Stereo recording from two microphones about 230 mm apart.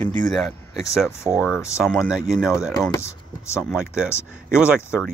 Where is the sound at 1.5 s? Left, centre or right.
Centre.